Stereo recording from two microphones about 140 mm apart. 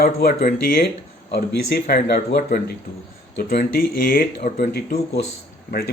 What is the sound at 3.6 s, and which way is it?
Speech, 90° left.